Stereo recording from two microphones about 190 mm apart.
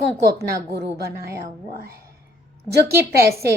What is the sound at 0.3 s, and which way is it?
Speech, 60° right (ahead or behind).